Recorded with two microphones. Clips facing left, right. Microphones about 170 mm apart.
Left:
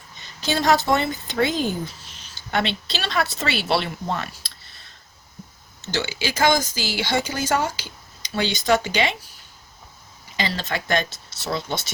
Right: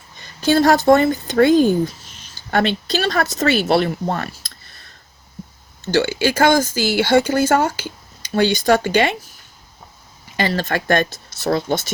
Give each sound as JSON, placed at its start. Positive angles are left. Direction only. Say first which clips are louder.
{"t": 0.4, "sound": "speech", "louder": "right 7 dB", "side_deg": -50}
{"t": 10.3, "sound": "speech", "louder": "right 6 dB", "side_deg": -55}